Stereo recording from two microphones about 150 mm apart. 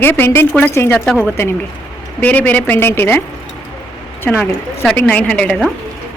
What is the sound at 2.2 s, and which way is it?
A woman's voice, 10° left (ahead or behind).